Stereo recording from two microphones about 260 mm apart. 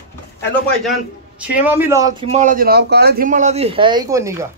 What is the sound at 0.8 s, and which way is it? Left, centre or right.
A man's voice, centre.